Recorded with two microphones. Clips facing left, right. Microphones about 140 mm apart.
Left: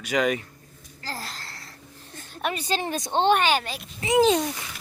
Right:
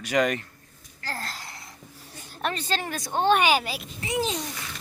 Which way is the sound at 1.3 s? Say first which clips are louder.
Right 1 dB; 15° right (ahead or behind).